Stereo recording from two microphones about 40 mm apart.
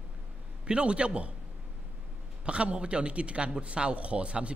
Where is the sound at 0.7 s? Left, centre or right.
Right.